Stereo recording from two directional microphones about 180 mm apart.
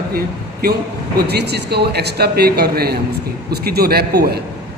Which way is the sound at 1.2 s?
65° right (ahead or behind).